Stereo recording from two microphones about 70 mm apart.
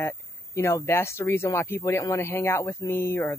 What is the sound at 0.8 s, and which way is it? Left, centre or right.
Speech, left.